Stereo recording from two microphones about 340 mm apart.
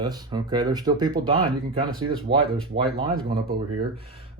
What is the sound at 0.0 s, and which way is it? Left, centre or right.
Speech, centre.